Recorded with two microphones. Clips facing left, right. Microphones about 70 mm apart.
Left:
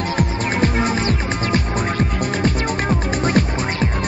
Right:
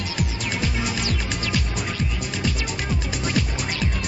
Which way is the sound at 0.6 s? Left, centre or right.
Left.